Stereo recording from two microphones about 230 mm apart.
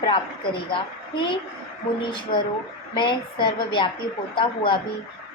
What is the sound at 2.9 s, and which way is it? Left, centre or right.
A woman's voice, centre.